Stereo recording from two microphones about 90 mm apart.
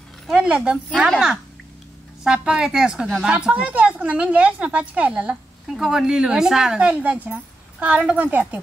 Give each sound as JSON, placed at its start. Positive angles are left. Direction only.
{"t": 0.3, "sound": "a woman's voice", "side_deg": -10}